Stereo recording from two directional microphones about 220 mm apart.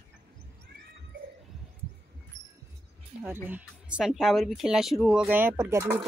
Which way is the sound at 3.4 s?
5° right (ahead or behind).